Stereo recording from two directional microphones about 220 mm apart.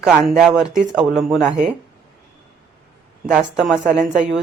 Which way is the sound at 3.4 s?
Centre (ahead or behind).